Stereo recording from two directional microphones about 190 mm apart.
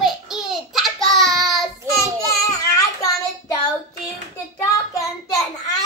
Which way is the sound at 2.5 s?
20° left (ahead or behind).